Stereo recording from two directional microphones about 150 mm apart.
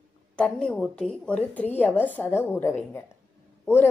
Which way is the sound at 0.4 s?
5° left (ahead or behind).